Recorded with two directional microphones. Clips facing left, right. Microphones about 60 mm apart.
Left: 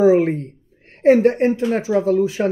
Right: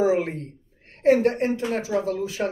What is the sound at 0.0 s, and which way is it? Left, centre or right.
A woman's voice, left.